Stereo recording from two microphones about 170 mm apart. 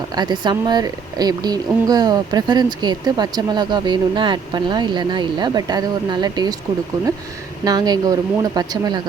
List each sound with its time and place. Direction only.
0.2 s a woman's voice: 25° right (ahead or behind)
7.6 s a woman's voice: 25° right (ahead or behind)